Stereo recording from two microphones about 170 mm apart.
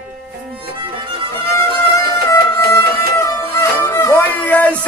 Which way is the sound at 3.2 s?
15° left (ahead or behind).